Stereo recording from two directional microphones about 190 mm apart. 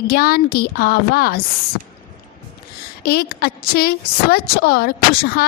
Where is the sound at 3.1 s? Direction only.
55° left (ahead or behind).